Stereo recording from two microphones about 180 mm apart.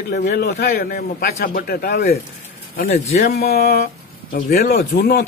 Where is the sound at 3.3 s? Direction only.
60° left (ahead or behind).